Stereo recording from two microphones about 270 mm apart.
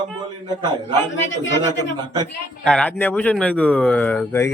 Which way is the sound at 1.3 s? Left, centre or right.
Left.